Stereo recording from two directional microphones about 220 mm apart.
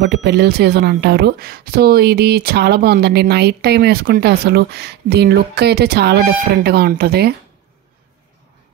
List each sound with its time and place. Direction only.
0.0 s a woman's voice: 50° right (ahead or behind)